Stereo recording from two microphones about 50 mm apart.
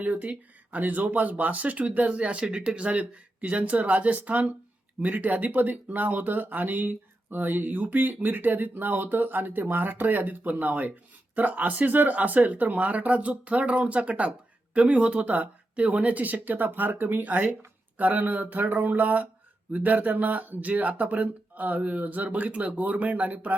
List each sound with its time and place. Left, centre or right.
0.0 s speech: right